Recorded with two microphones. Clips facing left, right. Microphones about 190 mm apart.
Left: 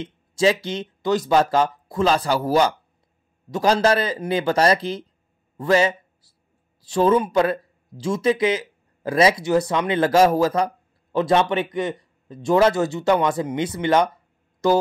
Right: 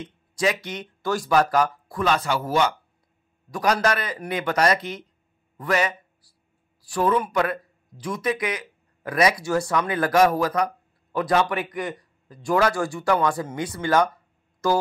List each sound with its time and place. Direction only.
0.0 s a man's voice: 25° left (ahead or behind)